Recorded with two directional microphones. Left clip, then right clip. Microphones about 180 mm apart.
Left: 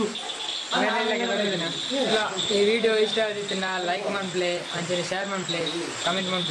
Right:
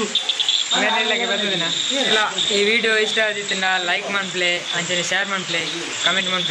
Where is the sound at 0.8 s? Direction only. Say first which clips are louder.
Right 5 dB; 20° right (ahead or behind).